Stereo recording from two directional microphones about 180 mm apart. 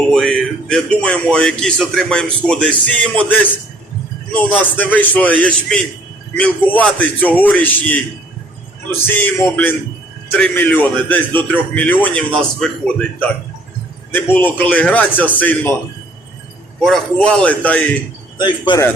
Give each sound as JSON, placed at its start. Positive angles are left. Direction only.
{"t": 0.1, "sound": "a man's voice", "side_deg": 5}
{"t": 4.5, "sound": "a man's voice", "side_deg": 10}
{"t": 14.1, "sound": "a man's voice", "side_deg": 10}
{"t": 16.8, "sound": "a man's voice", "side_deg": 0}
{"t": 18.3, "sound": "speech", "side_deg": 25}